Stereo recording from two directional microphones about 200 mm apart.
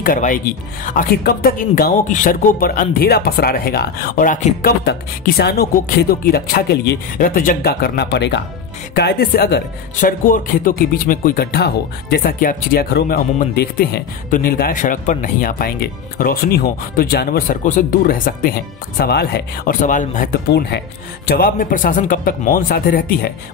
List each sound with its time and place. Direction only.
0.0 s speech: 45° left (ahead or behind)